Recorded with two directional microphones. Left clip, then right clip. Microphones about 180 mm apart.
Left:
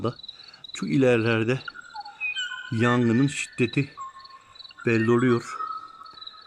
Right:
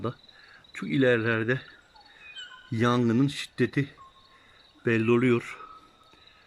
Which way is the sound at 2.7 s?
5° left (ahead or behind).